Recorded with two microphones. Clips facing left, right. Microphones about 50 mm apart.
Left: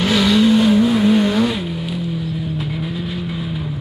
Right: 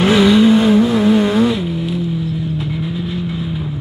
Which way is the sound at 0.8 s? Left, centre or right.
Centre.